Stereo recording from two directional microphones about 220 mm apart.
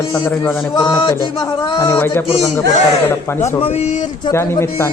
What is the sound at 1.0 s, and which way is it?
A man's voice, 20° left (ahead or behind).